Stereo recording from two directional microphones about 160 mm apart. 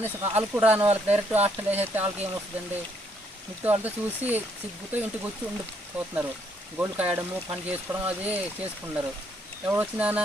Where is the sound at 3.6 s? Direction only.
10° right (ahead or behind).